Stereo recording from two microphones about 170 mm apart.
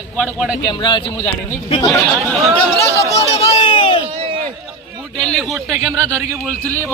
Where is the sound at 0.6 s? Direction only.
25° left (ahead or behind).